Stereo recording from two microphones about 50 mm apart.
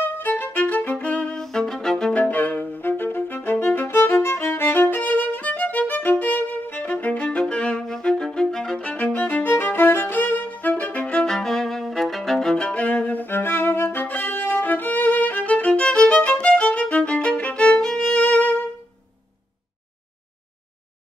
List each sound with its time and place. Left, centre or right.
0.0 s violin: left
0.9 s music: left
1.3 s music: centre
2.1 s music: left
2.8 s music: left
4.1 s violin: left
7.2 s violin: centre
8.8 s music: left
11.2 s violin: centre
12.7 s violin: left
17.7 s music: centre
18.2 s music: left